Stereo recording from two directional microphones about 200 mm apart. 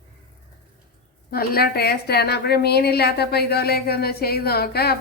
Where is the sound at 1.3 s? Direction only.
50° left (ahead or behind).